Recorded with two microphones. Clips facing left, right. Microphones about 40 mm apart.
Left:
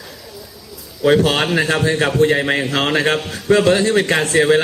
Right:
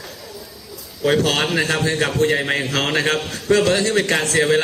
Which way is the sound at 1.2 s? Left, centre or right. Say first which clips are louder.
Left 3 dB; left.